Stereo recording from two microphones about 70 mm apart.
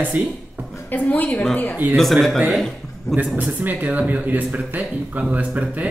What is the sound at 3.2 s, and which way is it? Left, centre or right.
Speech, right.